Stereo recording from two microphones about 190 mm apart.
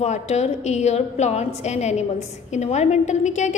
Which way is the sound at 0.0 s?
35° left (ahead or behind).